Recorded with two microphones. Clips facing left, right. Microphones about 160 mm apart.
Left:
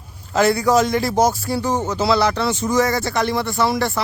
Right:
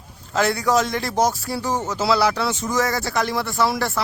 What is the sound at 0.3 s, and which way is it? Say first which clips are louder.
Speech: left 4 dB; centre (ahead or behind).